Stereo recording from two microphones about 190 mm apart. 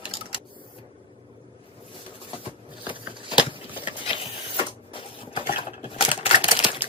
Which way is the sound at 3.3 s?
25° left (ahead or behind).